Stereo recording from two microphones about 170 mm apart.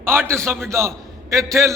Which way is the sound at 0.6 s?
15° right (ahead or behind).